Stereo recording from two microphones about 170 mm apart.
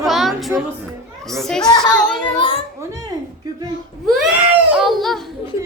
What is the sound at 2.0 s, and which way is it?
Child singing, 5° left (ahead or behind).